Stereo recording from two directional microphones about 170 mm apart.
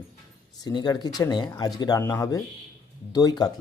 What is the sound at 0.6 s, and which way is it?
Speech, 25° left (ahead or behind).